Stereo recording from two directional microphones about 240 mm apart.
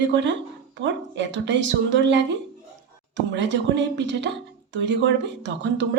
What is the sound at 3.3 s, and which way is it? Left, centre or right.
A woman's voice, right.